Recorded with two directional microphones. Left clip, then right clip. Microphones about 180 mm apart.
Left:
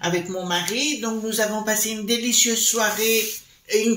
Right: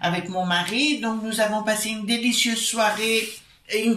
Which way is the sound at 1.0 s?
40° left (ahead or behind).